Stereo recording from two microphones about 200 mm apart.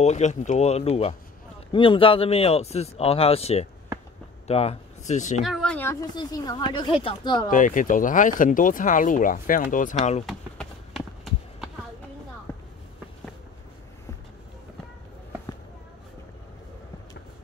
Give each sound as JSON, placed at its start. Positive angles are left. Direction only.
{"t": 0.0, "sound": "a woman's voice", "side_deg": 35}
{"t": 5.4, "sound": "a woman's voice", "side_deg": 0}
{"t": 7.4, "sound": "speech", "side_deg": 40}
{"t": 10.2, "sound": "run", "side_deg": 0}
{"t": 12.5, "sound": "a sound", "side_deg": 10}